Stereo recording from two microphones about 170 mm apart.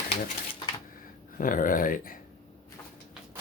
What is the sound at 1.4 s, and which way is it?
Speech, 50° left (ahead or behind).